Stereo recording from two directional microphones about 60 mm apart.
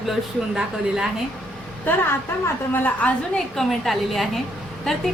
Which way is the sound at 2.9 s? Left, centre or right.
Left.